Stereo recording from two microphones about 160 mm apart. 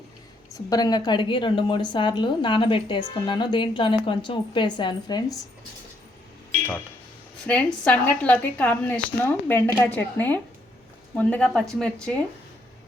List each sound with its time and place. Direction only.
0.5 s a woman's voice: 25° left (ahead or behind)
7.4 s a woman's voice: 10° left (ahead or behind)